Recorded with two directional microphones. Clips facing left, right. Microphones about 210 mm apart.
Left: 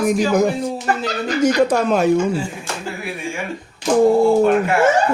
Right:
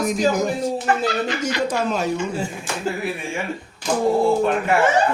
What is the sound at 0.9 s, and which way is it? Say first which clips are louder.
Speech: left 1 dB; 40° left (ahead or behind).